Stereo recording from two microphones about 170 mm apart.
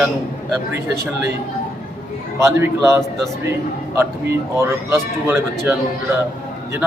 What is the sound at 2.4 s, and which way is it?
A man's voice, 15° right (ahead or behind).